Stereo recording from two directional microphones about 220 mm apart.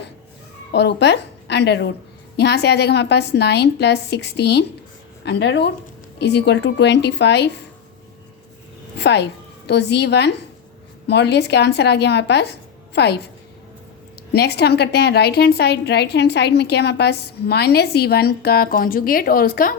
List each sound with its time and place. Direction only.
0.7 s a woman's voice: 50° left (ahead or behind)
9.0 s a woman's voice: 50° left (ahead or behind)
14.3 s a woman's voice: 50° left (ahead or behind)